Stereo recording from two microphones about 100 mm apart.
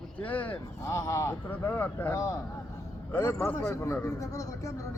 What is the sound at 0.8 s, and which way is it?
Speech, 30° left (ahead or behind).